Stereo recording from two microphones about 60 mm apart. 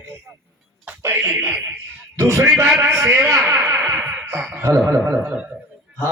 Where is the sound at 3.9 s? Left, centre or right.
Right.